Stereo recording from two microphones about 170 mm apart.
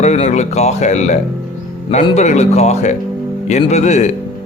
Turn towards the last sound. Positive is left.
turn(degrees=45)  # may be behind; listen again after turning